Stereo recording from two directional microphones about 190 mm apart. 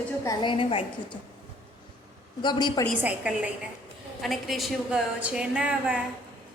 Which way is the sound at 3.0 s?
5° right (ahead or behind).